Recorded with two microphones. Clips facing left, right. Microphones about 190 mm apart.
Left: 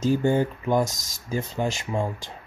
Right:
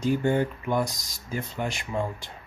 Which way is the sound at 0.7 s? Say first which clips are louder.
Left 4 dB; 45° left (ahead or behind).